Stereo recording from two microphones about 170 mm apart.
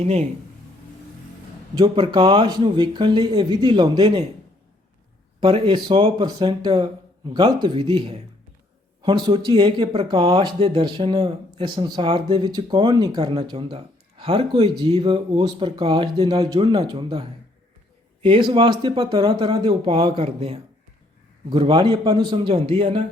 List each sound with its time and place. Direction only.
0.0 s speech: 35° right (ahead or behind)
1.7 s speech: 25° right (ahead or behind)
5.4 s speech: 30° right (ahead or behind)